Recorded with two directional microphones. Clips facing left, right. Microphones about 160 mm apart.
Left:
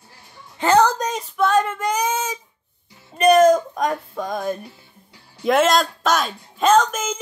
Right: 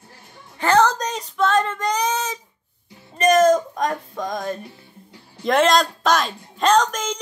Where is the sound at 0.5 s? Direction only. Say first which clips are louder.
Left 1 dB; 15° left (ahead or behind).